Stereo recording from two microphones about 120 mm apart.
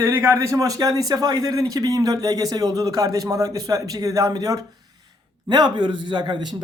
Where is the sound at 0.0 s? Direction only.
20° right (ahead or behind).